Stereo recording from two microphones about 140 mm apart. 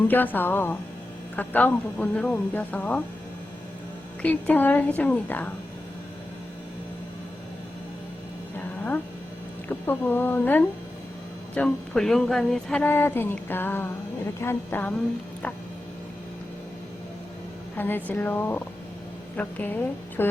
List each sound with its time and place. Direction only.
0.1 s speech: 15° left (ahead or behind)
4.2 s speech: 10° left (ahead or behind)
9.6 s speech: 15° left (ahead or behind)
17.7 s speech: 15° left (ahead or behind)